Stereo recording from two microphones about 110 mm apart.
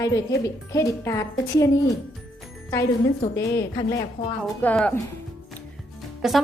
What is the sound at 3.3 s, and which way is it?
Speech, 25° left (ahead or behind).